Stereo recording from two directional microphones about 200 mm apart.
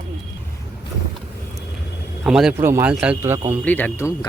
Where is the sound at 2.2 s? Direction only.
5° right (ahead or behind).